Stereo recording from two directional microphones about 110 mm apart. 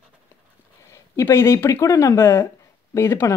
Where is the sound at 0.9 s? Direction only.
25° left (ahead or behind).